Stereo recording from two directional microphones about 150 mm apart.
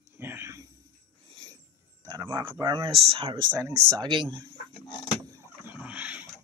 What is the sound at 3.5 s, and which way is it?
Speech, 20° right (ahead or behind).